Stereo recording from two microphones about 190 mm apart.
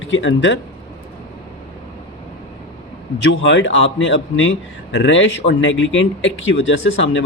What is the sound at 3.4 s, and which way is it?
A man's voice, 75° left (ahead or behind).